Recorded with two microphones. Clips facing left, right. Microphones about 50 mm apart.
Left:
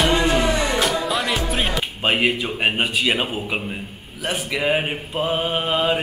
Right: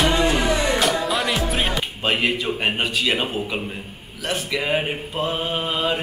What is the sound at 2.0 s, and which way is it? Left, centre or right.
Speech, centre.